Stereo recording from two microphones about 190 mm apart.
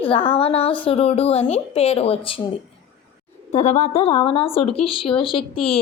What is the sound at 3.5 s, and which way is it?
Speech, 35° left (ahead or behind).